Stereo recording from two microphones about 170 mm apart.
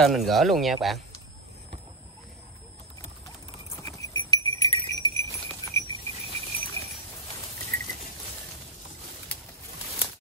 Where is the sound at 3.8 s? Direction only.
20° left (ahead or behind).